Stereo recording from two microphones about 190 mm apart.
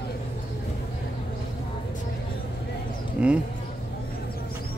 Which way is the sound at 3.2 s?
5° right (ahead or behind).